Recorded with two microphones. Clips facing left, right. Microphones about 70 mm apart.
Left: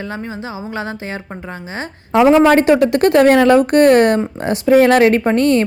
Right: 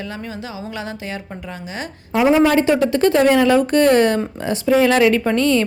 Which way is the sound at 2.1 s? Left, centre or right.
Left.